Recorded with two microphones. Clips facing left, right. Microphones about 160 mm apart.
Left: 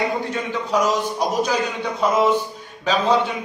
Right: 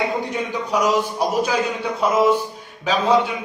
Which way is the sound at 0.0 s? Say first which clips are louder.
Even; 20° right (ahead or behind).